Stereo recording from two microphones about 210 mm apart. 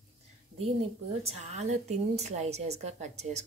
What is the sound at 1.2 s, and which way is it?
A woman's voice, 30° right (ahead or behind).